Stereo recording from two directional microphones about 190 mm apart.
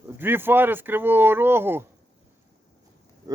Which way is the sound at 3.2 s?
20° right (ahead or behind).